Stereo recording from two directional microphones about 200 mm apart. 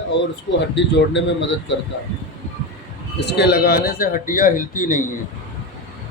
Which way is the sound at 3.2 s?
55° left (ahead or behind).